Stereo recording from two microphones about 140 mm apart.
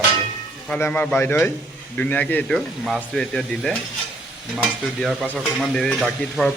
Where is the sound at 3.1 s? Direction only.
5° left (ahead or behind).